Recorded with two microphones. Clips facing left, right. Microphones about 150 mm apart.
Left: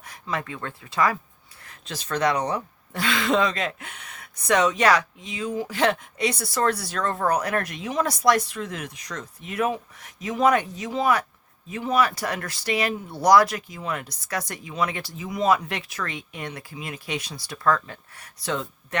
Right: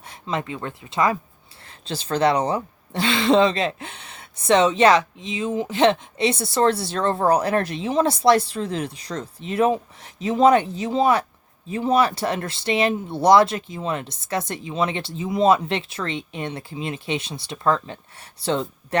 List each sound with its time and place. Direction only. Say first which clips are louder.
0.1 s speech: right 3 dB; 25° right (ahead or behind)